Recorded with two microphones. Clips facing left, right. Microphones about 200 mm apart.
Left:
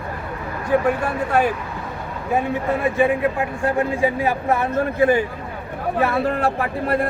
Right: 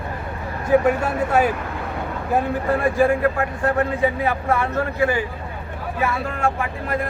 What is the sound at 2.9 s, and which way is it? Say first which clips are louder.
A man's voice: right 1 dB; centre (ahead or behind).